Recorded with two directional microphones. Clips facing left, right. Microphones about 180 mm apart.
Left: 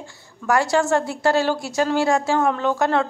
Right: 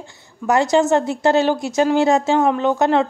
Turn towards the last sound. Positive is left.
turn(degrees=-20)  # may be behind; listen again after turning